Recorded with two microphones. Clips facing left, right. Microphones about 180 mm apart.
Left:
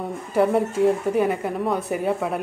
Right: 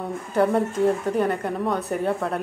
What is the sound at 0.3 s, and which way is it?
Speech, centre (ahead or behind).